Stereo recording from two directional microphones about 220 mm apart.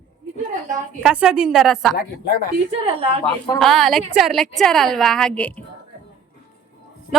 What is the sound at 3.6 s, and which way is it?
A woman's voice, centre (ahead or behind).